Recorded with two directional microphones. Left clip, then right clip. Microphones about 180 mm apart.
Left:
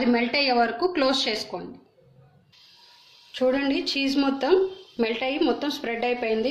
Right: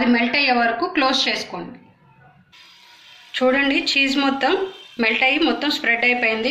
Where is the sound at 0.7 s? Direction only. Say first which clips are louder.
Right 4 dB; 65° left (ahead or behind).